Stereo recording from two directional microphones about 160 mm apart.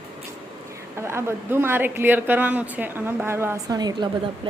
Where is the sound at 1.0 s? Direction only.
15° right (ahead or behind).